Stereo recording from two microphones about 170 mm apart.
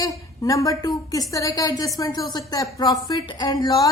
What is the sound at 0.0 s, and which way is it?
A woman's voice, 20° left (ahead or behind).